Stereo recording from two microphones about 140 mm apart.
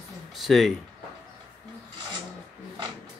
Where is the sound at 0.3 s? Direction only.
Centre (ahead or behind).